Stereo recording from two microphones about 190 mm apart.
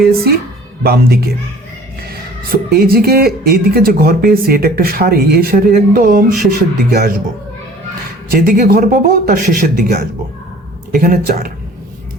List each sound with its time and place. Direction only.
0.0 s speech: 55° right (ahead or behind)
8.3 s speech: 50° right (ahead or behind)
11.0 s speech: 50° right (ahead or behind)